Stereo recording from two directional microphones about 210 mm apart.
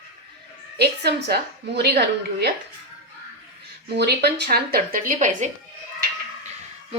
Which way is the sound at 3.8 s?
50° right (ahead or behind).